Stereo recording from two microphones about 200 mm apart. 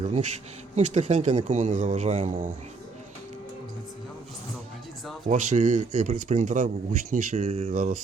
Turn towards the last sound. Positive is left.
turn(degrees=-40)  # may be behind; listen again after turning